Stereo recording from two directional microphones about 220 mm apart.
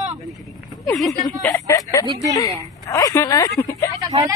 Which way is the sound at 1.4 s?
15° left (ahead or behind).